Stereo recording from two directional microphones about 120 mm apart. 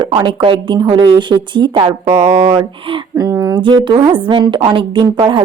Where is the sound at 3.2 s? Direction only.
20° right (ahead or behind).